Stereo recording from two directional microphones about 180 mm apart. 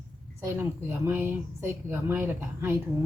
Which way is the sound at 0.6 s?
10° right (ahead or behind).